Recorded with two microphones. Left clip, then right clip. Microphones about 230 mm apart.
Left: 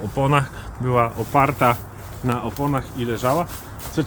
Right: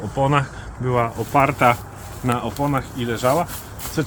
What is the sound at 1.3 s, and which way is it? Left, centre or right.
Speech, centre.